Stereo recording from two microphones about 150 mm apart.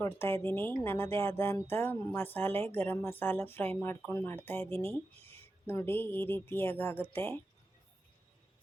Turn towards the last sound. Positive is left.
turn(degrees=15)  # may be behind; listen again after turning